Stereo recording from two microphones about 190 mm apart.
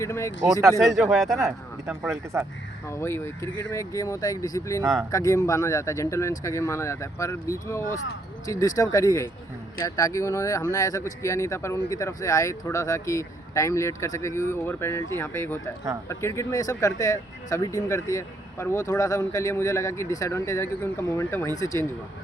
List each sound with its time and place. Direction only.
0.0 s speech: 15° left (ahead or behind)
0.8 s speech: centre (ahead or behind)
2.3 s speech: 15° right (ahead or behind)
2.8 s speech: 15° left (ahead or behind)
4.8 s speech: centre (ahead or behind)
5.1 s speech: 15° left (ahead or behind)